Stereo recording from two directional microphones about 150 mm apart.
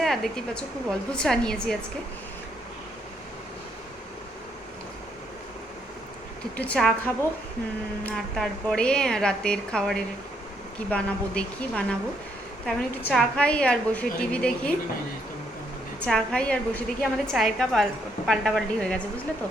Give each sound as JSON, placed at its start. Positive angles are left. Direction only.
{"t": 0.0, "sound": "a woman's voice", "side_deg": 0}
{"t": 6.6, "sound": "a woman's voice", "side_deg": 5}
{"t": 8.0, "sound": "a woman's voice", "side_deg": 5}
{"t": 16.0, "sound": "a woman's voice", "side_deg": 5}